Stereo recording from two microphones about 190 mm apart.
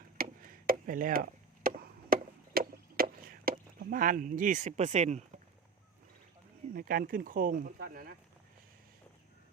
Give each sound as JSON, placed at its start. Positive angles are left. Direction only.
{"t": 0.2, "sound": "chop", "side_deg": -50}
{"t": 3.8, "sound": "speech", "side_deg": -50}
{"t": 6.7, "sound": "speech", "side_deg": -50}